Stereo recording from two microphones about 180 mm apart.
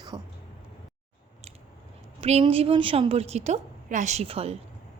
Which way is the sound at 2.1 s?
35° right (ahead or behind).